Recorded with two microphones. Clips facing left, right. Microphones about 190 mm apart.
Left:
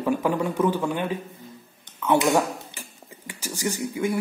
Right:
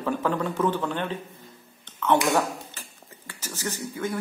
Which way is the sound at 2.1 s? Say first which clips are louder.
Left 3 dB; 15° left (ahead or behind).